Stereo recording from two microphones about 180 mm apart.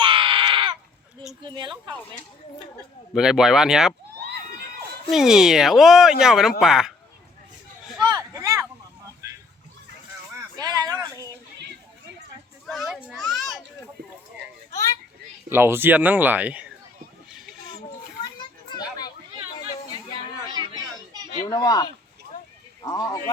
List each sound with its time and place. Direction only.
0.0 s a sound: 30° right (ahead or behind)
1.4 s speech: 25° right (ahead or behind)
3.2 s speech: 5° right (ahead or behind)
5.1 s speech: 5° right (ahead or behind)
8.0 s a sound: 20° right (ahead or behind)
10.6 s a sound: 20° right (ahead or behind)
12.6 s children playing: centre (ahead or behind)
14.7 s children playing: 20° left (ahead or behind)
15.4 s speech: 15° right (ahead or behind)
18.3 s children playing: 20° left (ahead or behind)
20.5 s chatter: 20° right (ahead or behind)
21.5 s speech: 20° left (ahead or behind)